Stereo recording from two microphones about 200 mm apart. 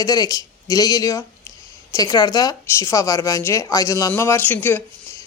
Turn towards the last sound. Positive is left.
turn(degrees=10)  # may be behind; listen again after turning